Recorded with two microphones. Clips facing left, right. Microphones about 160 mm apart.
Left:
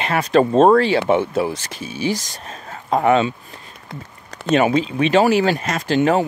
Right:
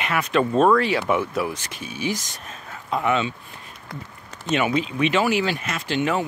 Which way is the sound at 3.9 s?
25° left (ahead or behind).